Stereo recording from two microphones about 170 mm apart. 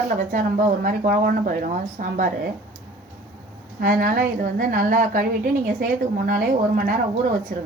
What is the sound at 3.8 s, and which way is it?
A woman's voice, 55° right (ahead or behind).